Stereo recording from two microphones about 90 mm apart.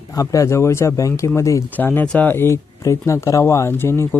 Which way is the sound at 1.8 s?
20° left (ahead or behind).